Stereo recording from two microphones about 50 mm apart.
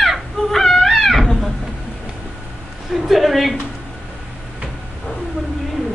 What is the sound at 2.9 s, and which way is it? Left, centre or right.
Speech, centre.